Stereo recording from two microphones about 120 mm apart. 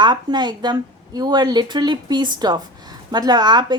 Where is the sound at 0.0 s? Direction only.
40° right (ahead or behind).